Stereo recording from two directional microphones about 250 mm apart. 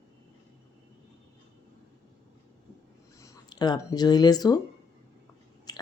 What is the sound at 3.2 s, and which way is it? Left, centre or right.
Speech, centre.